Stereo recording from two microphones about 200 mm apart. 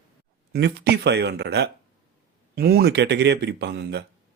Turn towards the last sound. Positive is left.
turn(degrees=-60)  # may be behind; listen again after turning